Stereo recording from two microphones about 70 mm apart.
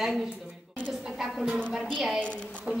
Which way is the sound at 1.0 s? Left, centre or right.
Centre.